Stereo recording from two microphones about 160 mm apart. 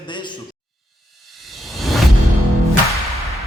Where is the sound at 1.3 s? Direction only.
Centre (ahead or behind).